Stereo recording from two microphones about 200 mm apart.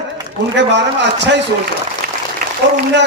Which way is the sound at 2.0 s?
45° right (ahead or behind).